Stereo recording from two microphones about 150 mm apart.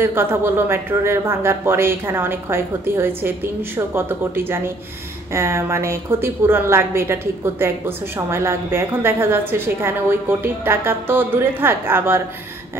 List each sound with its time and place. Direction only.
0.0 s a woman's voice: 15° right (ahead or behind)